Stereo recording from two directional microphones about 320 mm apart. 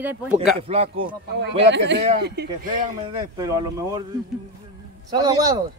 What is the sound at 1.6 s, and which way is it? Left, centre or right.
Speech, right.